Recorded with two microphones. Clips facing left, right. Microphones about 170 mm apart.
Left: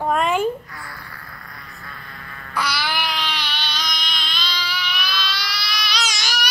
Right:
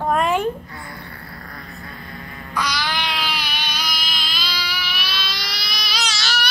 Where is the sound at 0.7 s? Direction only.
25° right (ahead or behind).